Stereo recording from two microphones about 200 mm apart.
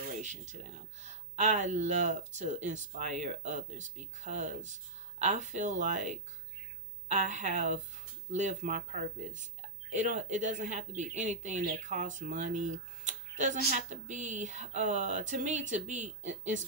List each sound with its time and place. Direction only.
0.2 s speech: 35° right (ahead or behind)